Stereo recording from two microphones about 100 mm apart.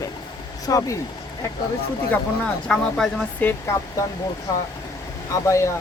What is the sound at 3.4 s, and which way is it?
Speech, 25° left (ahead or behind).